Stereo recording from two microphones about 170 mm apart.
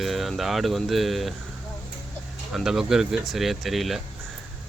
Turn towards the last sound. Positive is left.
turn(degrees=0)  # may be behind; listen again after turning